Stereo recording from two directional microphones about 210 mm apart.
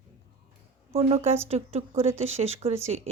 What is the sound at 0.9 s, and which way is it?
Speech, 30° right (ahead or behind).